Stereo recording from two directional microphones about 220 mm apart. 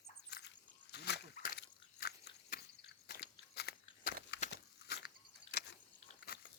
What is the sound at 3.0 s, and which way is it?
Biting, 45° left (ahead or behind).